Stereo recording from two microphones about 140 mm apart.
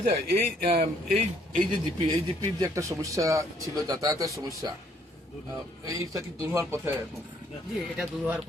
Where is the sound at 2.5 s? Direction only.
20° right (ahead or behind).